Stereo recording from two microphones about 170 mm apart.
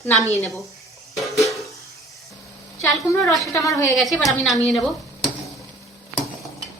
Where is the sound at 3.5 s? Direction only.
20° left (ahead or behind).